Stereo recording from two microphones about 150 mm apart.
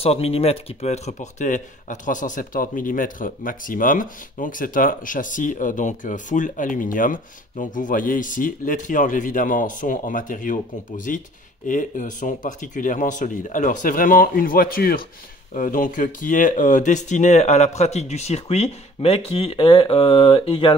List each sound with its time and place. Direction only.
0.0 s speech: 40° left (ahead or behind); by 15.0 s 80° left
15.5 s speech: 60° left (ahead or behind); by 20.7 s 35° left (ahead or behind)